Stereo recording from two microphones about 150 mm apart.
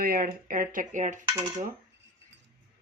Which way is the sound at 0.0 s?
75° right (ahead or behind).